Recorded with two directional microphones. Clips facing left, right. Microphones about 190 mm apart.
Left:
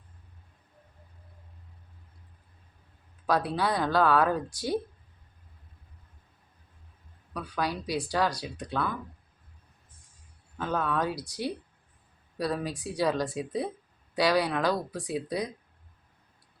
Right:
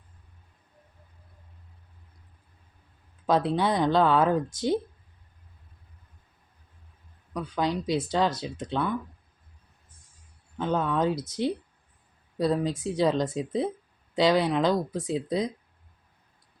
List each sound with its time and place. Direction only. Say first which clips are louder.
3.2 s a woman's voice: right 3 dB; 20° right (ahead or behind)
7.3 s a woman's voice: right 4 dB; 20° right (ahead or behind)
10.6 s a woman's voice: right 4 dB; 20° right (ahead or behind)